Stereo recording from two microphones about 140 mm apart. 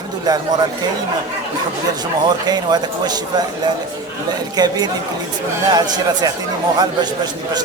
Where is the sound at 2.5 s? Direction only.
30° right (ahead or behind).